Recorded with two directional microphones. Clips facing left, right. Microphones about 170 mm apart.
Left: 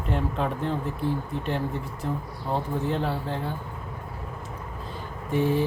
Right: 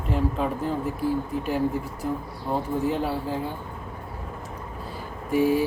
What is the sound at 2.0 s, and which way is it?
Mantra, 5° right (ahead or behind).